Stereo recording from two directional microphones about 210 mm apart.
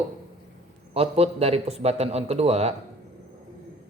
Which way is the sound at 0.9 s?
30° right (ahead or behind).